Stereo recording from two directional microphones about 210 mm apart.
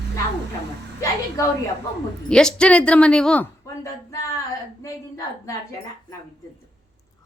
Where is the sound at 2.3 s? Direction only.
5° left (ahead or behind).